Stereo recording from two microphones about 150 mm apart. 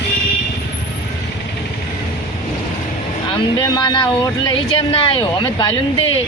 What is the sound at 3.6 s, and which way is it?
Speech, 30° left (ahead or behind).